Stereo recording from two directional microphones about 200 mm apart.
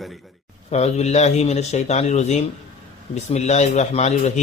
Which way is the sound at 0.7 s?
35° left (ahead or behind).